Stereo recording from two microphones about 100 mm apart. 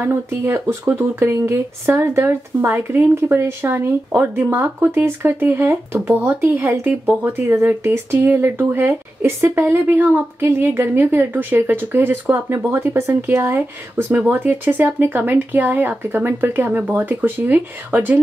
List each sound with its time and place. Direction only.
0.0 s speech: 25° right (ahead or behind)